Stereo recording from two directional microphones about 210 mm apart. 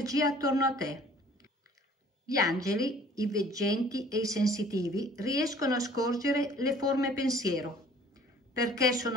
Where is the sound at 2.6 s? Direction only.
15° right (ahead or behind).